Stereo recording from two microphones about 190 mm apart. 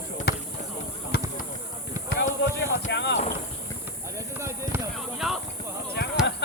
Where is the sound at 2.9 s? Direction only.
65° left (ahead or behind).